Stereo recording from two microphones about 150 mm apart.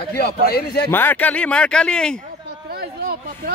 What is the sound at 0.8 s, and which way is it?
Speech, 15° left (ahead or behind).